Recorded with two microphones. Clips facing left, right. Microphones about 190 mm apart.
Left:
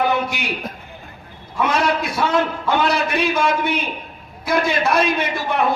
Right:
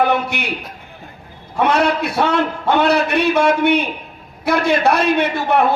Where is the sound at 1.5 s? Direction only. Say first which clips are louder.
Right 3 dB; 65° right (ahead or behind).